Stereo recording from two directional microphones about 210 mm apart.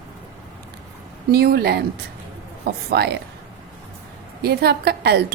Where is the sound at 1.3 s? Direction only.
50° right (ahead or behind).